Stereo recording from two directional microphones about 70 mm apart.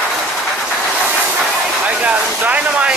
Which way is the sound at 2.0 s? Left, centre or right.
Right.